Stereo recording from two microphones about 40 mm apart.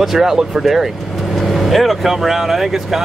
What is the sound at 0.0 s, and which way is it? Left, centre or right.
Speech, centre.